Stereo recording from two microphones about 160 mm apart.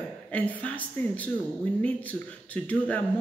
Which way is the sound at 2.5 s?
10° left (ahead or behind).